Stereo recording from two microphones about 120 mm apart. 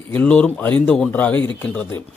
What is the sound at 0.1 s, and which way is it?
Speech, 10° left (ahead or behind).